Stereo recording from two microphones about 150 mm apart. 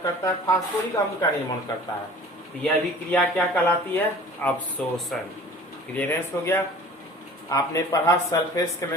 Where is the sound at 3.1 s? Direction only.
10° left (ahead or behind).